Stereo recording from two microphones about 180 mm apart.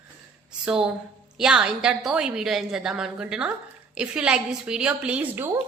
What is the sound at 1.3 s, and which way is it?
A woman's voice, 5° right (ahead or behind).